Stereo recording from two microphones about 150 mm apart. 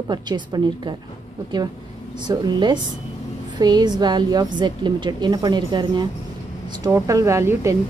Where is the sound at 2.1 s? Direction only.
30° right (ahead or behind).